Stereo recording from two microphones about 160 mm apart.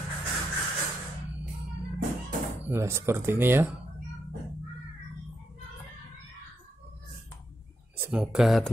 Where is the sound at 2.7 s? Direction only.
15° right (ahead or behind).